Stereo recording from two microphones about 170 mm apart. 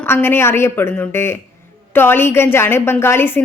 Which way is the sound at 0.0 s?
10° left (ahead or behind).